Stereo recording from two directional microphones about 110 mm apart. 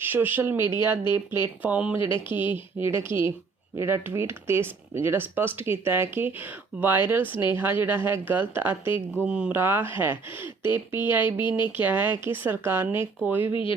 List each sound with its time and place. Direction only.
0.0 s speech: 20° right (ahead or behind)
9.2 s speech: 10° right (ahead or behind)
11.4 s speech: 45° left (ahead or behind)
11.8 s speech: 15° right (ahead or behind)
13.5 s speech: 50° left (ahead or behind)